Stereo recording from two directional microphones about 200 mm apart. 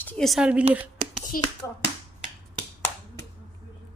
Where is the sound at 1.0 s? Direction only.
35° right (ahead or behind).